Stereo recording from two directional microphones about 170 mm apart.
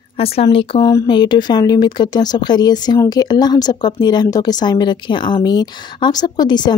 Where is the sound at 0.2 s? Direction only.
35° left (ahead or behind).